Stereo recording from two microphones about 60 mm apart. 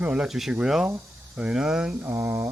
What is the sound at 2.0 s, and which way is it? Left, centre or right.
Mantra, right.